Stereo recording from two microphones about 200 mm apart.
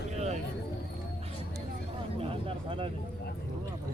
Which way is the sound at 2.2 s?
25° right (ahead or behind).